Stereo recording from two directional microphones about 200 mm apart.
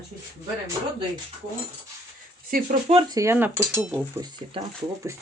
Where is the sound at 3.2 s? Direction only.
10° right (ahead or behind).